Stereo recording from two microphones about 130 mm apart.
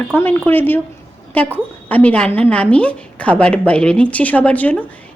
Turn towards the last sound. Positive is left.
turn(degrees=10)  # may be behind; listen again after turning